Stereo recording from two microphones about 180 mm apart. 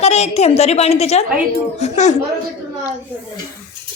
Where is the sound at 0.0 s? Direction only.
35° left (ahead or behind).